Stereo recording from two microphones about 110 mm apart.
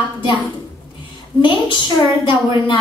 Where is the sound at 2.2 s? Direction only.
50° left (ahead or behind).